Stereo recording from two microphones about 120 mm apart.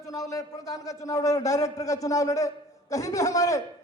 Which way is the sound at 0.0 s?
30° left (ahead or behind).